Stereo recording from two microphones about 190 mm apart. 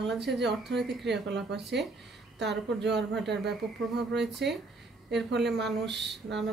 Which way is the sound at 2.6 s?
65° right (ahead or behind).